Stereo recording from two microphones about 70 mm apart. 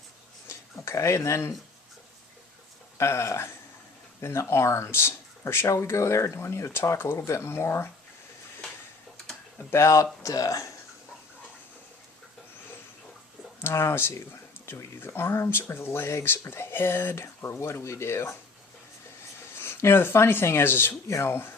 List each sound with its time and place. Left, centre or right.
0.4 s a sound: left
3.0 s speech: left
9.6 s speech: left
13.6 s speech: left
19.5 s speech: left